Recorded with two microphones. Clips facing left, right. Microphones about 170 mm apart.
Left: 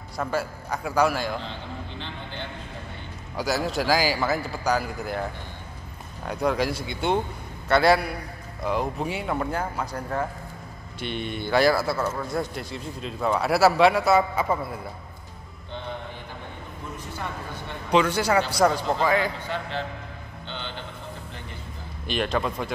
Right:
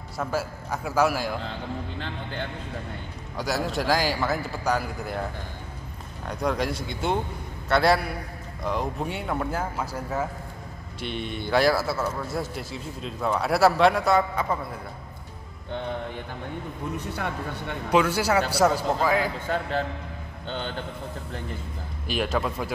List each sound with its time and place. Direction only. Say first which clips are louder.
0.2 s a man's voice: left 1 dB; 5° right (ahead or behind)
3.3 s a man's voice: left 2 dB; centre (ahead or behind)
6.2 s a man's voice: left 2 dB; 5° left (ahead or behind)
16.9 s speech: right 3 dB; 65° right (ahead or behind)
17.9 s a man's voice: left 1 dB; 5° right (ahead or behind)
19.4 s speech: right 4 dB; 45° right (ahead or behind)
22.0 s a man's voice: left 1 dB; 5° right (ahead or behind)